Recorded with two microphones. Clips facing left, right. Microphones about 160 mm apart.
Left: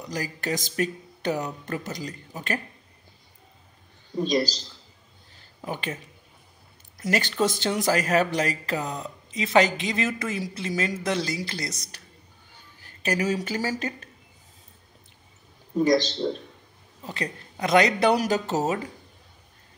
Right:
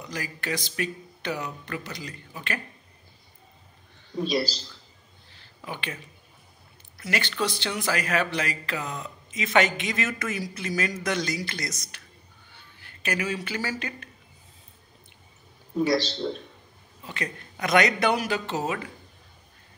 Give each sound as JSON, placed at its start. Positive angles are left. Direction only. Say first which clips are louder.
{"t": 0.1, "sound": "speech", "louder": "left 3 dB", "side_deg": 40}
{"t": 4.3, "sound": "speech", "louder": "left 3 dB", "side_deg": 40}
{"t": 5.7, "sound": "speech", "louder": "left 4 dB", "side_deg": 40}
{"t": 7.0, "sound": "speech", "louder": "left 4 dB", "side_deg": 40}
{"t": 17.0, "sound": "speech", "louder": "left 2 dB", "side_deg": 35}